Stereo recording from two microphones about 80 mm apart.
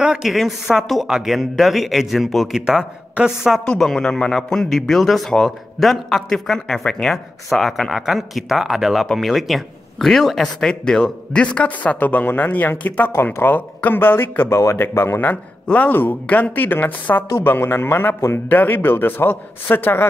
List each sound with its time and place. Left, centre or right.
0.0 s a man's voice: centre
3.6 s a man's voice: centre; by 15.3 s left
15.6 s a woman's voice: centre